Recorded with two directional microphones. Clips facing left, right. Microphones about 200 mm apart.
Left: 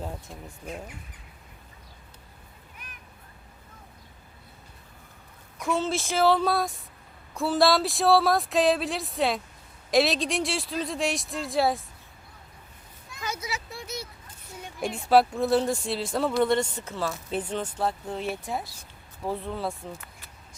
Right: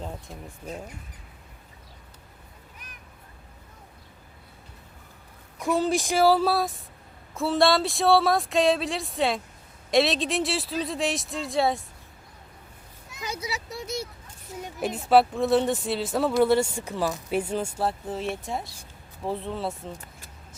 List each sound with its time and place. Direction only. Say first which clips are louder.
0.0 s speech: even; 5° left (ahead or behind)
5.5 s speech: right 3 dB; 15° right (ahead or behind); by 11.8 s centre (ahead or behind)
13.1 s vehicle: left 1 dB; 20° right (ahead or behind)
13.5 s speech: right 3 dB; 45° right (ahead or behind)
14.8 s speech: right 1 dB; centre (ahead or behind)